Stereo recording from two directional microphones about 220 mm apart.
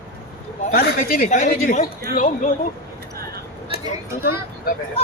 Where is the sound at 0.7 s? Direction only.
45° left (ahead or behind).